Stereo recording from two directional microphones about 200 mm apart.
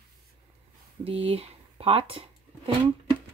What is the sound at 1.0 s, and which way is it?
Speech, 30° right (ahead or behind).